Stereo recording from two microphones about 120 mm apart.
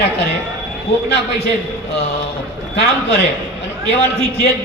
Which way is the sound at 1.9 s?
60° left (ahead or behind).